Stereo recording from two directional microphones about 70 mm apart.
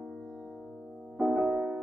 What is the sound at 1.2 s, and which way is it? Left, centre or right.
Music, centre.